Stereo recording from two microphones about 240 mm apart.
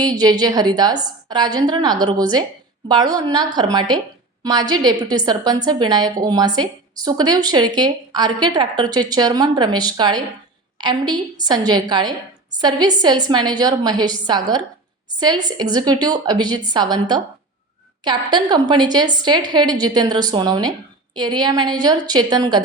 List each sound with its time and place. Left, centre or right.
0.0 s a woman's voice: centre